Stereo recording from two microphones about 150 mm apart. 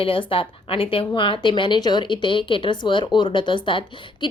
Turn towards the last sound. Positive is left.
turn(degrees=35)  # may be behind; listen again after turning